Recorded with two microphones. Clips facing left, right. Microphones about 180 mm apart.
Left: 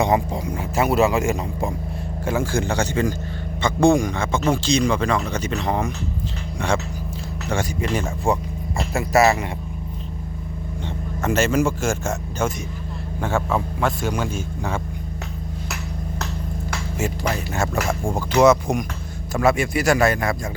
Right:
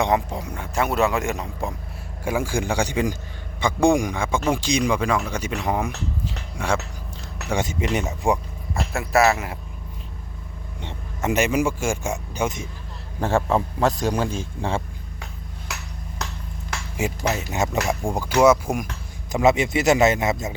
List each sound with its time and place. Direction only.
0.0 s speech: centre (ahead or behind)
2.2 s speech: 10° right (ahead or behind)
7.5 s speech: 20° right (ahead or behind)
8.7 s speech: centre (ahead or behind)
10.8 s speech: 20° right (ahead or behind)
13.1 s a man's voice: 35° right (ahead or behind)
17.0 s speech: 20° right (ahead or behind)
19.3 s speech: 20° right (ahead or behind)